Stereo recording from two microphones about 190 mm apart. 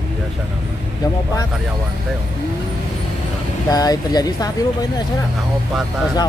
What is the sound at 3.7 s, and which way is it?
Speech, 20° left (ahead or behind).